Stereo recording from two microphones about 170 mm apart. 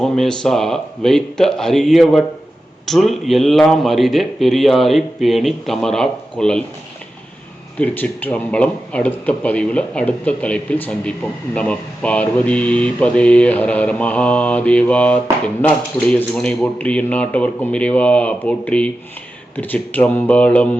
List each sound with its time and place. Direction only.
0.0 s a man's voice: centre (ahead or behind)
7.8 s speech: 10° left (ahead or behind)